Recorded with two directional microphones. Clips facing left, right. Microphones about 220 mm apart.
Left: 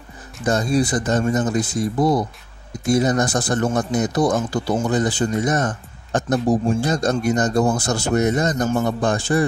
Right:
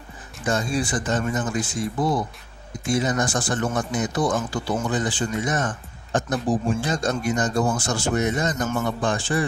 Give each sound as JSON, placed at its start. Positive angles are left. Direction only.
{"t": 0.5, "sound": "speech", "side_deg": 40}